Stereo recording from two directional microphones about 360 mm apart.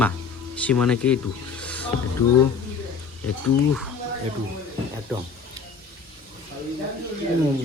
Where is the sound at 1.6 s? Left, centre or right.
Centre.